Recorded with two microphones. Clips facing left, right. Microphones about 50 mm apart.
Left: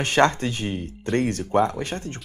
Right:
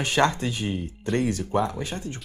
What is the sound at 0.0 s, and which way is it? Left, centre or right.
Speech, left.